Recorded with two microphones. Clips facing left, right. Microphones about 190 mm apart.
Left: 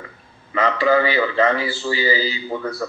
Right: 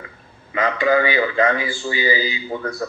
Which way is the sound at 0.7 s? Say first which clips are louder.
Even; 35° left (ahead or behind).